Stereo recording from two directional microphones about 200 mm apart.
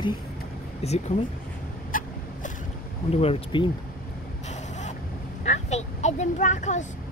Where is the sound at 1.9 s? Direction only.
40° left (ahead or behind).